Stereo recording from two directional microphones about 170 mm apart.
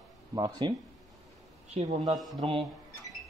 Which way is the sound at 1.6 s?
40° right (ahead or behind).